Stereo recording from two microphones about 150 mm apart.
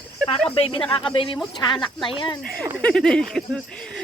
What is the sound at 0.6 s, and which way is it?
Speech, 35° left (ahead or behind).